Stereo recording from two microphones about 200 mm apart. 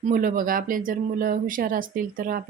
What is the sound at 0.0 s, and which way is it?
Speech, 40° right (ahead or behind).